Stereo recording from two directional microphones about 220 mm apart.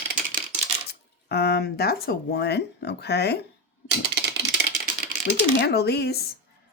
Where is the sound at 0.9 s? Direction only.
45° left (ahead or behind).